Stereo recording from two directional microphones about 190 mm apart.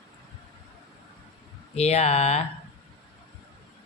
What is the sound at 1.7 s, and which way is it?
Speech, 35° left (ahead or behind).